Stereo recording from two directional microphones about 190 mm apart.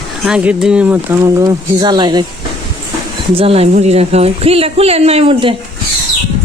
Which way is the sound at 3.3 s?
30° right (ahead or behind).